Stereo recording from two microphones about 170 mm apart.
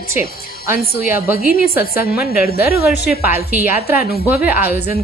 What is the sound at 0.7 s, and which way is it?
A woman's voice, 65° left (ahead or behind).